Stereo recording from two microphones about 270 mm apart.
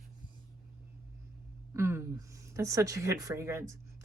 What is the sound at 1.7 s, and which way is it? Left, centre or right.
Speech, centre.